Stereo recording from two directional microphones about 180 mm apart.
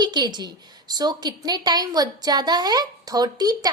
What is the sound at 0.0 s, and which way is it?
A woman's voice, 25° right (ahead or behind).